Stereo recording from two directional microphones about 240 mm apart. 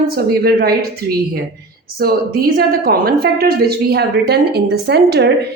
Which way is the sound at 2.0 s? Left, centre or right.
Right.